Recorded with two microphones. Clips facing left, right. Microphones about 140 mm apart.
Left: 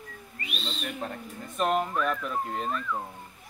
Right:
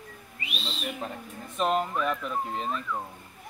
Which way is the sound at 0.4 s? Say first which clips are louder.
Even; 5° right (ahead or behind).